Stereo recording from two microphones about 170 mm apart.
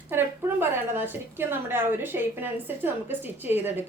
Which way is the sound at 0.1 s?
10° right (ahead or behind).